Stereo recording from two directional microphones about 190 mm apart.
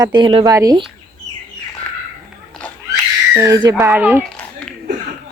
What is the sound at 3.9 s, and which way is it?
Speech, 10° right (ahead or behind).